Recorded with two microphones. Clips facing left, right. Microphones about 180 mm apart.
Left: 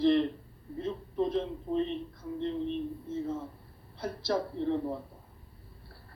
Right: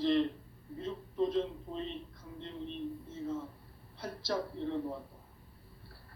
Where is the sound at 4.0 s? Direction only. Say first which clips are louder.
Left 5 dB; 60° left (ahead or behind).